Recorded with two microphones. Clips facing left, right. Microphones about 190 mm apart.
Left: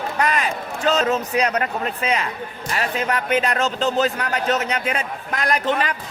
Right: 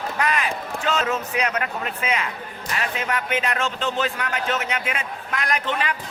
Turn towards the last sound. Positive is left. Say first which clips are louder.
# left 4 dB
turn(degrees=40)  # may be behind; listen again after turning